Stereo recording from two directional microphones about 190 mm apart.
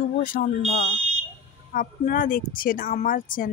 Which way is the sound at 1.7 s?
45° left (ahead or behind).